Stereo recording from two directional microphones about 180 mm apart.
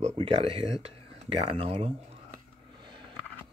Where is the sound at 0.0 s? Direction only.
30° right (ahead or behind).